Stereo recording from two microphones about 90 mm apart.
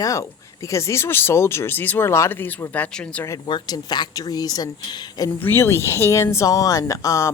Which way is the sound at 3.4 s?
55° left (ahead or behind).